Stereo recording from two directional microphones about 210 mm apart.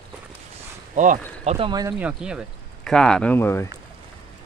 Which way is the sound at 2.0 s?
5° right (ahead or behind).